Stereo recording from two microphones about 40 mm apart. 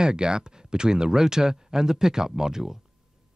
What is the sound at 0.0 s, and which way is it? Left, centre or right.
Speech, right.